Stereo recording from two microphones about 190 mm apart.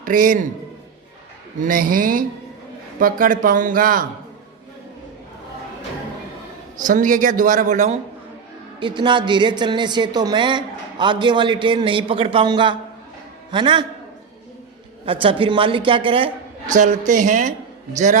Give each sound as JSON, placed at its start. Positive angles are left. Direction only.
{"t": 0.0, "sound": "a man's voice", "side_deg": -45}
{"t": 1.6, "sound": "speech", "side_deg": -45}
{"t": 6.8, "sound": "speech", "side_deg": -45}
{"t": 8.8, "sound": "a woman's voice", "side_deg": -25}
{"t": 15.0, "sound": "a woman's voice", "side_deg": -30}